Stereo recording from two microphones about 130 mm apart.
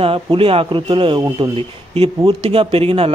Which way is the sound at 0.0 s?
45° right (ahead or behind).